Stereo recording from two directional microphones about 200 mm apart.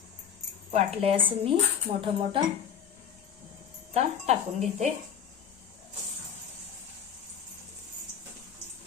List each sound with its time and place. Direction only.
0.7 s speech: 30° right (ahead or behind)
3.9 s speech: 35° right (ahead or behind)